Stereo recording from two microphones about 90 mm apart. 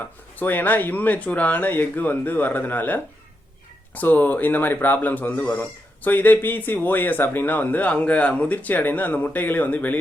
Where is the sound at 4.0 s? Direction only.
20° left (ahead or behind).